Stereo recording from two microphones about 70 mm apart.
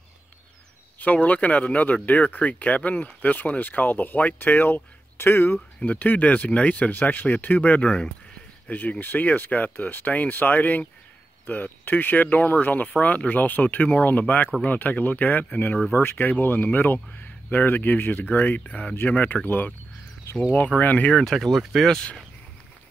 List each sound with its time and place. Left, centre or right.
0.9 s speech: left
5.8 s speech: left
15.9 s speech: left
21.1 s speech: centre